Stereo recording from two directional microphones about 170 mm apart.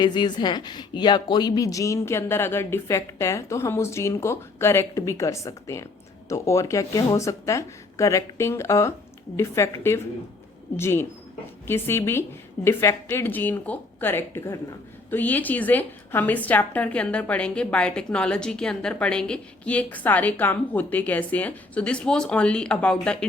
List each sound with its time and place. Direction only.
0.0 s a woman's voice: 25° left (ahead or behind); by 23.1 s 5° left (ahead or behind)